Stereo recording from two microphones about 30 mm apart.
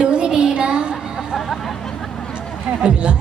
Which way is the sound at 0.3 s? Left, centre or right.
Right.